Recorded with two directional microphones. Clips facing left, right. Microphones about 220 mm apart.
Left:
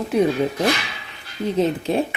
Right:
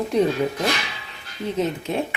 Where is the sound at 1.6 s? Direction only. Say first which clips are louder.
Left 4 dB; 35° left (ahead or behind).